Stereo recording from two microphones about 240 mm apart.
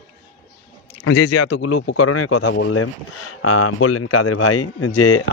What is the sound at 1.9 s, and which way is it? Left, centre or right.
Speech, left.